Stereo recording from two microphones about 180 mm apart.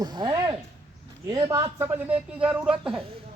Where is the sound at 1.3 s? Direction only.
15° right (ahead or behind).